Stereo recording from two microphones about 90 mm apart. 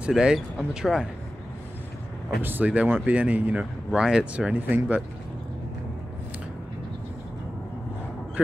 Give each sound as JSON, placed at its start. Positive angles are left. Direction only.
{"t": 0.0, "sound": "speech", "side_deg": -10}
{"t": 2.4, "sound": "speech", "side_deg": -20}